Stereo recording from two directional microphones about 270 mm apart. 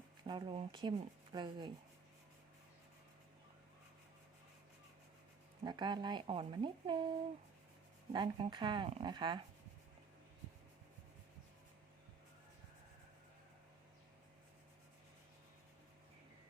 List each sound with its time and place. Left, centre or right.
0.3 s speech: centre
5.6 s speech: centre
8.1 s speech: centre